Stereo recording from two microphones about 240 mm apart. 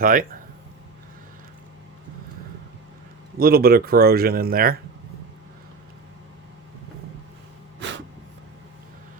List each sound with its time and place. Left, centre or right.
0.0 s speech: right
3.3 s speech: right
7.8 s a sound: right